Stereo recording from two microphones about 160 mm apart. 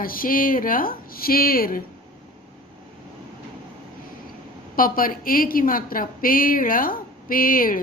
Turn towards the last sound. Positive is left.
turn(degrees=60)  # may be behind; listen again after turning